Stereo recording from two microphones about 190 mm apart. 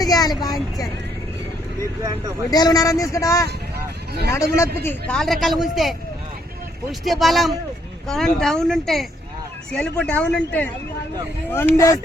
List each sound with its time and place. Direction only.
0.0 s vehicle: 20° left (ahead or behind)
2.5 s speech: 20° left (ahead or behind); by 6.0 s centre (ahead or behind)
7.0 s speech: centre (ahead or behind); by 11.9 s 15° left (ahead or behind)